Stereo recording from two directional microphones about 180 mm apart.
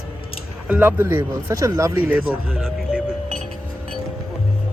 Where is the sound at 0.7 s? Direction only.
10° right (ahead or behind).